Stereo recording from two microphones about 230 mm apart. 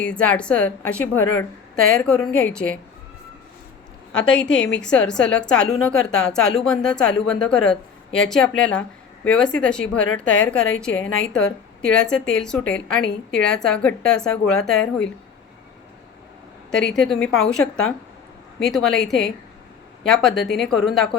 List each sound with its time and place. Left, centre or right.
0.0 s a woman's voice: centre
4.1 s a woman's voice: centre
10.9 s a woman's voice: left
11.3 s a woman's voice: centre
16.7 s a woman's voice: centre